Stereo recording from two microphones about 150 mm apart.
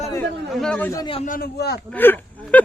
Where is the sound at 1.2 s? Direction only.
80° left.